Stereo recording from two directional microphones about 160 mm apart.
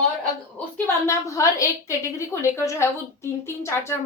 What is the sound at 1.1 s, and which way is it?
A woman's voice, 20° left (ahead or behind).